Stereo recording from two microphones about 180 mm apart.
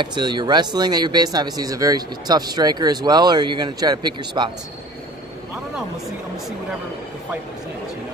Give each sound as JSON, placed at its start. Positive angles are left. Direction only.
{"t": 0.0, "sound": "speech", "side_deg": -25}